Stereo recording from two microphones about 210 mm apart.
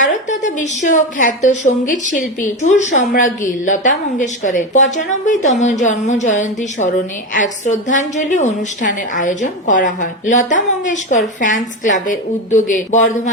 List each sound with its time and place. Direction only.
0.0 s a woman's voice: 35° left (ahead or behind)